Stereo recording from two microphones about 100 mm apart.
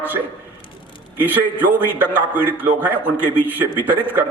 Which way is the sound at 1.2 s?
20° right (ahead or behind).